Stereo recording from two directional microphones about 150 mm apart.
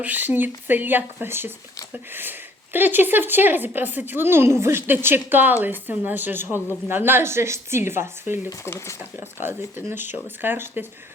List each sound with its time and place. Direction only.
0.0 s a woman's voice: 10° right (ahead or behind)
8.4 s speech: 20° left (ahead or behind)
9.2 s a woman's voice: 15° right (ahead or behind)